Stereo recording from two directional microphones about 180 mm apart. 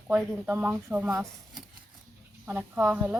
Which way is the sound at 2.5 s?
10° right (ahead or behind).